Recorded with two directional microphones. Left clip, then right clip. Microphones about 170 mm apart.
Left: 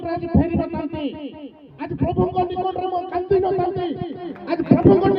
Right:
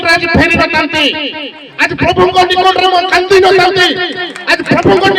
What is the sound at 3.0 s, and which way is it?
A man's voice, 40° left (ahead or behind).